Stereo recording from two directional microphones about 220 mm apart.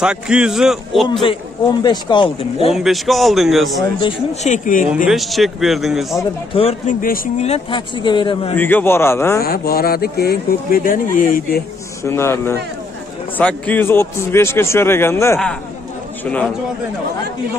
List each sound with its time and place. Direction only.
0.0 s a man's voice: 5° right (ahead or behind)
1.2 s speech: 20° left (ahead or behind)
2.7 s a man's voice: centre (ahead or behind)
4.0 s speech: 30° left (ahead or behind)
5.0 s a man's voice: centre (ahead or behind)
6.5 s speech: 25° left (ahead or behind)
7.0 s speech: 40° left (ahead or behind)
7.5 s speech: 20° left (ahead or behind)
8.5 s a man's voice: 10° left (ahead or behind)
9.4 s speech: 45° left (ahead or behind)
12.0 s a man's voice: 10° left (ahead or behind)